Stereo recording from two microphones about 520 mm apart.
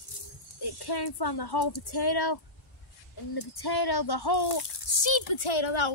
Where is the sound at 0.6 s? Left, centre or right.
Left.